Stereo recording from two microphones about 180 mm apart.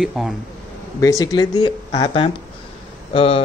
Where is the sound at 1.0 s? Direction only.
20° left (ahead or behind).